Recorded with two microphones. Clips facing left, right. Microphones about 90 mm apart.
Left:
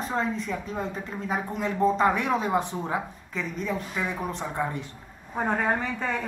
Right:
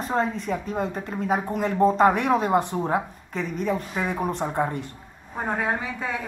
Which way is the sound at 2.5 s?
Centre (ahead or behind).